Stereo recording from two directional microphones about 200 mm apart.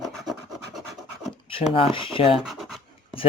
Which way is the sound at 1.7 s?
25° left (ahead or behind).